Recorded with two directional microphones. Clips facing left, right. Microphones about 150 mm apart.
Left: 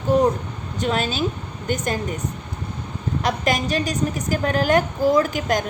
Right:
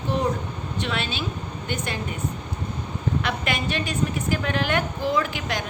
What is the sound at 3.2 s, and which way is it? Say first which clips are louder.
A woman's voice: left 10 dB; 40° left (ahead or behind).